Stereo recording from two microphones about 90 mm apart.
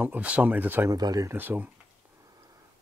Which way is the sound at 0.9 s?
45° right (ahead or behind).